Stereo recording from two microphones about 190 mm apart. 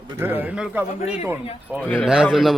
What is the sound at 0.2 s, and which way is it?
Speech, 10° right (ahead or behind).